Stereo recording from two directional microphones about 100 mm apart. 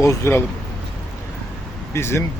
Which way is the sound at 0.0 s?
30° left (ahead or behind).